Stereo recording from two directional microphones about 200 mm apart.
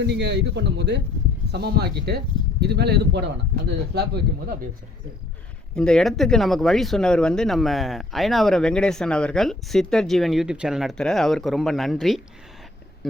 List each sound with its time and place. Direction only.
0.1 s speech: 60° right (ahead or behind)
5.7 s speech: 5° left (ahead or behind)